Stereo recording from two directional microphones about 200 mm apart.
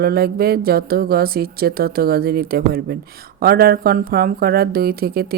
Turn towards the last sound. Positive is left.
turn(degrees=-50)  # may be behind; listen again after turning